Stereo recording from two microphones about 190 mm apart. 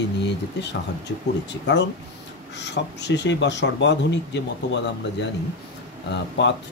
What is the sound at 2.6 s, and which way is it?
Speech, 65° left (ahead or behind).